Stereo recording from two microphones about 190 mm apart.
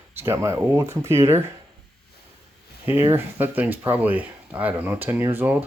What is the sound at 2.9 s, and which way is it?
Speech, 10° right (ahead or behind).